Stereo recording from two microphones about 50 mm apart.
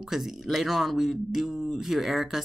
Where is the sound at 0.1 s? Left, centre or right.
Centre.